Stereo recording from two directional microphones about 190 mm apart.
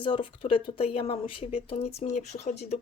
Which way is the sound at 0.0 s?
25° left (ahead or behind).